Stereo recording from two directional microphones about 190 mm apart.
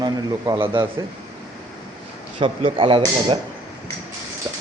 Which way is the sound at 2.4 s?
30° right (ahead or behind).